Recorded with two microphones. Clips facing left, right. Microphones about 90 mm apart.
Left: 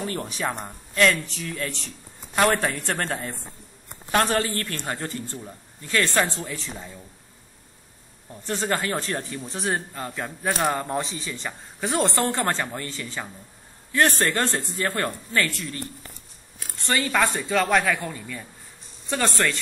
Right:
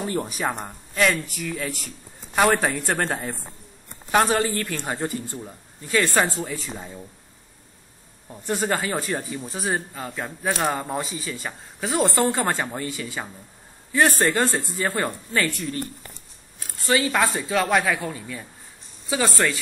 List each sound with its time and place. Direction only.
0.0 s speech: 15° right (ahead or behind)
4.2 s speech: 10° right (ahead or behind)
6.8 s speech: 15° right (ahead or behind)
8.3 s speech: 15° right (ahead or behind)
16.7 s speech: 5° right (ahead or behind)